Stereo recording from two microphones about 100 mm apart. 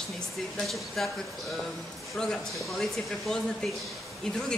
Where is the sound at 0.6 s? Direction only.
Centre (ahead or behind).